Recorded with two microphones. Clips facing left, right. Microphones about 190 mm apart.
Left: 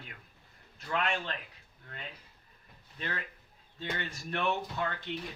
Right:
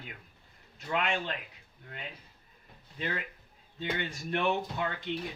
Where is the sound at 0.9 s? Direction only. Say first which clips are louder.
Right 2 dB; 15° right (ahead or behind).